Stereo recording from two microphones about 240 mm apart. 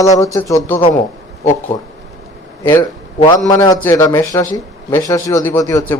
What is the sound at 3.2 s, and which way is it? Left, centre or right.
A man's voice, centre.